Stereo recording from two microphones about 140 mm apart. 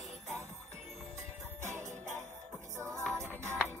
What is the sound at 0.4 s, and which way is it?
Music, 20° right (ahead or behind).